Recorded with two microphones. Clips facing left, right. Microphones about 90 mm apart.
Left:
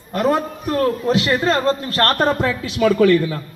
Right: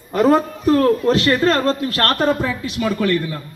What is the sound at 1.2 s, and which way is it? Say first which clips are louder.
Speech: right 2 dB; 20° left (ahead or behind).